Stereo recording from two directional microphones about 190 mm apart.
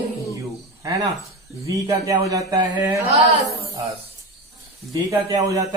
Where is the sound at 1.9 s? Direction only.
15° right (ahead or behind).